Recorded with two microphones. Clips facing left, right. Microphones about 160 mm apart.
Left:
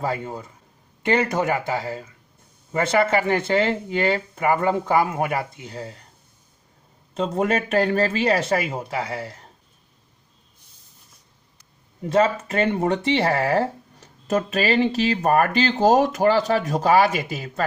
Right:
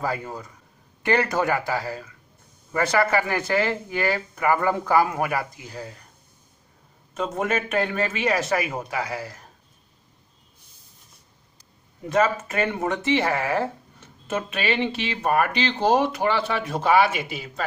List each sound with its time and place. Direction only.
0.0 s speech: 25° left (ahead or behind)
7.2 s speech: 30° left (ahead or behind)
12.1 s speech: 30° left (ahead or behind)